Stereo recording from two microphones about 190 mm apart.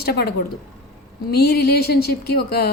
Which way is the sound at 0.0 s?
55° left (ahead or behind).